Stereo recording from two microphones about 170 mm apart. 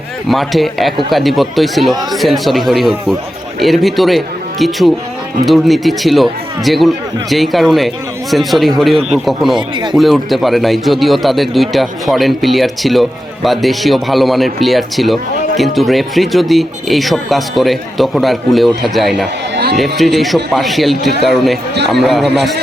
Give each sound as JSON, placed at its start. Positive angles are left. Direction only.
{"t": 0.3, "sound": "a man's voice", "side_deg": 0}
{"t": 5.5, "sound": "a man's voice", "side_deg": 0}
{"t": 9.6, "sound": "speech", "side_deg": -30}
{"t": 9.9, "sound": "a man's voice", "side_deg": 0}